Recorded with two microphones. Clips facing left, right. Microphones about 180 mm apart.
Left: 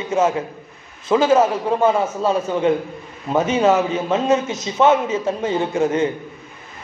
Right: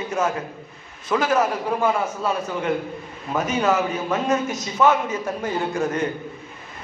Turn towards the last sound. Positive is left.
turn(degrees=25)  # may be behind; listen again after turning